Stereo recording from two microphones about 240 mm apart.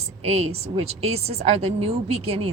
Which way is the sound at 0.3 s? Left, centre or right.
Right.